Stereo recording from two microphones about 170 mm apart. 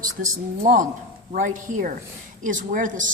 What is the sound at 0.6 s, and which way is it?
Speech, 50° right (ahead or behind).